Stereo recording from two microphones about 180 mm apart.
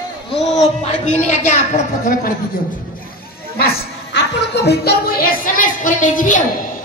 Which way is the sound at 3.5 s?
65° left (ahead or behind).